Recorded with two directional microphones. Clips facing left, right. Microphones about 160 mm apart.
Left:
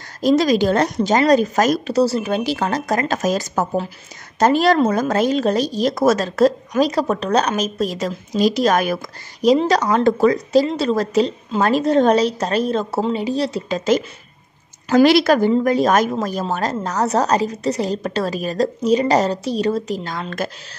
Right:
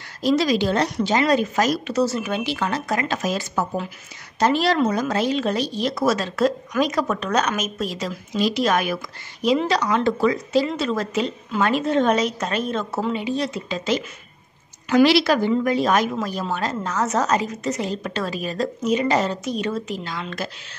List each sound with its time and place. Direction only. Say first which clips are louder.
0.2 s a woman's voice: left 4 dB; 45° left (ahead or behind)
2.0 s a woman's voice: left 5 dB; 35° left (ahead or behind)